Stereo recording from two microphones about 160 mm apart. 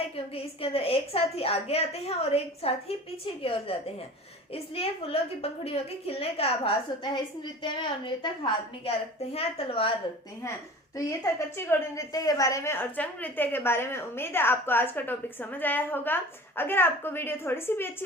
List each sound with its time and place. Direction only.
0.3 s a woman's voice: 35° left (ahead or behind)
10.9 s a woman's voice: 20° left (ahead or behind)